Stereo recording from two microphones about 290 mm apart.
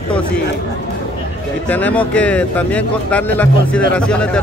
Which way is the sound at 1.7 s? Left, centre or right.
Centre.